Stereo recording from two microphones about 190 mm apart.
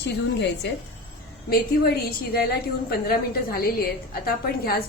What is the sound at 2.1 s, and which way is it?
A woman's voice, 55° left (ahead or behind).